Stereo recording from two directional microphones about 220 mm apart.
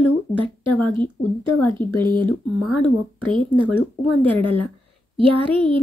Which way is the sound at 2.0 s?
20° right (ahead or behind).